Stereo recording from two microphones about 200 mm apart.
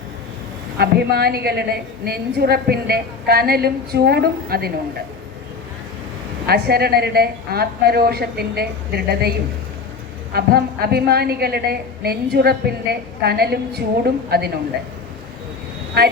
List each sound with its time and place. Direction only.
0.8 s a woman's voice: 55° right (ahead or behind)
6.4 s a woman's voice: 50° right (ahead or behind)
10.3 s a woman's voice: 50° right (ahead or behind)
16.0 s a woman's voice: 55° right (ahead or behind)